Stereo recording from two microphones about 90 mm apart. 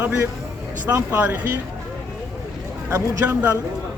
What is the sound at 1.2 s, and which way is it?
Speech, 20° right (ahead or behind).